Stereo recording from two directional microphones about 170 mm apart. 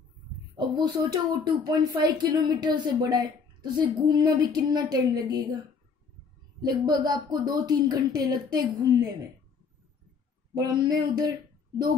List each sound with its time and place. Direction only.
0.6 s speech: 25° right (ahead or behind)
6.6 s speech: 25° right (ahead or behind)
10.5 s speech: 25° right (ahead or behind)